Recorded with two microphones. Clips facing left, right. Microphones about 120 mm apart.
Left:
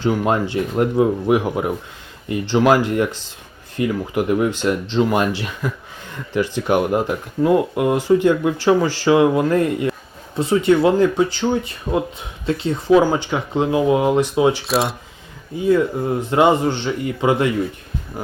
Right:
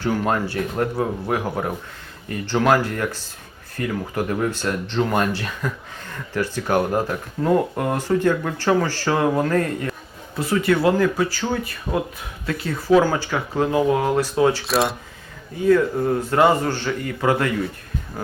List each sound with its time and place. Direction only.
0.0 s speech: 20° left (ahead or behind)
14.6 s speech: centre (ahead or behind)
16.2 s speech: 20° left (ahead or behind)